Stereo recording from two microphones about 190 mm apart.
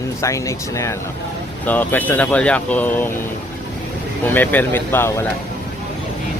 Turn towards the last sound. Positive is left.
turn(degrees=10)  # may be behind; listen again after turning